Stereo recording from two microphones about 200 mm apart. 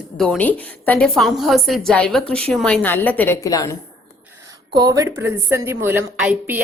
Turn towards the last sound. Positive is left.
turn(degrees=-5)  # may be behind; listen again after turning